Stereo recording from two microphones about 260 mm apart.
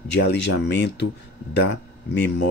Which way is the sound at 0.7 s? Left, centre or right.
Left.